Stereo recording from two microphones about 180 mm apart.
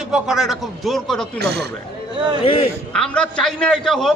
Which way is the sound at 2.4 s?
30° left (ahead or behind).